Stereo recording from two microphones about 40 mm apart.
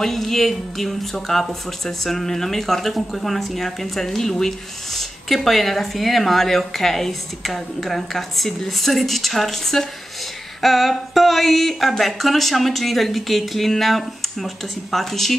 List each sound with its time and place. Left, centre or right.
0.0 s speech: centre